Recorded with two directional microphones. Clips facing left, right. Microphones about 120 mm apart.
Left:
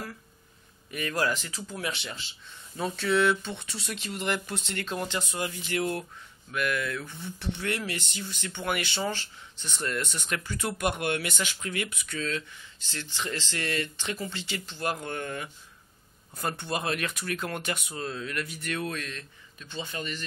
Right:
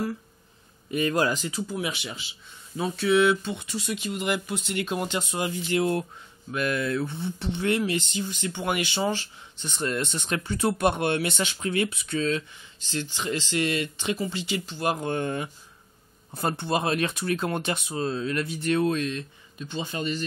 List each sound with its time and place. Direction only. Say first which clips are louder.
0.9 s speech: right 5 dB; 25° right (ahead or behind)